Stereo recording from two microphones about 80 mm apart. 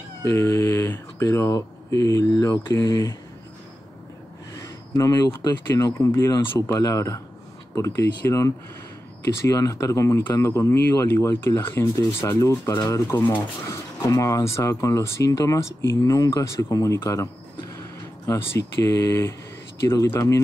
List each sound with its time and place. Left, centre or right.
0.2 s speech: left
4.6 s speech: left
12.2 s speech: left